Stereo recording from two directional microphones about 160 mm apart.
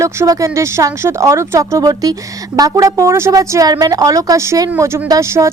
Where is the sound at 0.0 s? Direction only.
20° right (ahead or behind).